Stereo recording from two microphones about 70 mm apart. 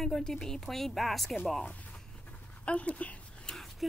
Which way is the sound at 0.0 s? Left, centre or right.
Centre.